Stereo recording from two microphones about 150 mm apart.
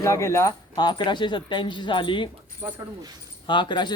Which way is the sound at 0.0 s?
20° left (ahead or behind).